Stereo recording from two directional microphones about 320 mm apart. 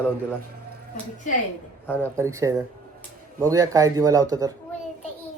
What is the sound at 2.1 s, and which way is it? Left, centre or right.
Speech, centre.